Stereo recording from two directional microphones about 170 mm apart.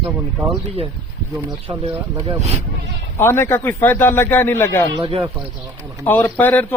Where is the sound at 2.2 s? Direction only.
40° right (ahead or behind).